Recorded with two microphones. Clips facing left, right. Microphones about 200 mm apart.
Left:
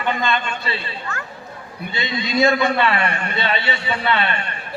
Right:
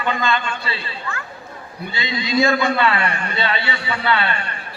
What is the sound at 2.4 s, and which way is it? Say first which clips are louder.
A man's voice: left 1 dB; 20° left (ahead or behind).